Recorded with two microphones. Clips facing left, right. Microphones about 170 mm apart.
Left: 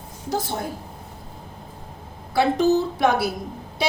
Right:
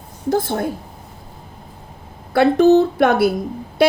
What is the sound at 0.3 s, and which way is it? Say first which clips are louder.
Speech: right 7 dB; 55° right (ahead or behind).